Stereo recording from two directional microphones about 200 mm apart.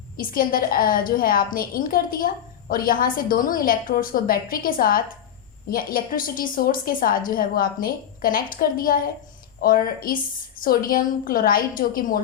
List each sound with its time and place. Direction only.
0.2 s a woman's voice: 45° left (ahead or behind)